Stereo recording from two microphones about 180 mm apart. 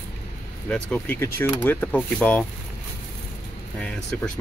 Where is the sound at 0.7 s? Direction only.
10° left (ahead or behind).